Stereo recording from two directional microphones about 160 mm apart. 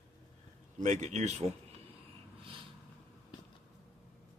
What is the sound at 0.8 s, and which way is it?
Speech, 45° right (ahead or behind).